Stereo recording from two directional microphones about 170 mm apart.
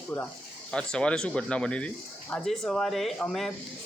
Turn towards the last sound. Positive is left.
turn(degrees=0)  # may be behind; listen again after turning